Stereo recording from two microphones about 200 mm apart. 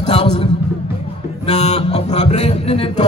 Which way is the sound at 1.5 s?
35° left (ahead or behind).